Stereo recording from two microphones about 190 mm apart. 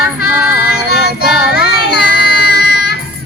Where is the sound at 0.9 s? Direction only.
55° left (ahead or behind).